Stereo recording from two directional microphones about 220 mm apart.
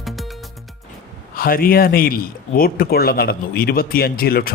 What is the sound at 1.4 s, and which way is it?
Speech, 40° left (ahead or behind).